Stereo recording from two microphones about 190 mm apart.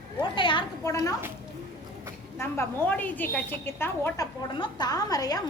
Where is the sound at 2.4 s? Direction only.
10° left (ahead or behind).